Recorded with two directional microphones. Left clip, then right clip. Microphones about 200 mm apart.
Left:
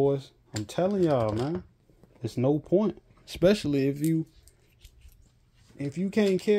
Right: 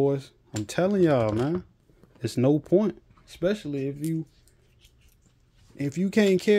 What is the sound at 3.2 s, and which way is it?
Speech, 30° left (ahead or behind).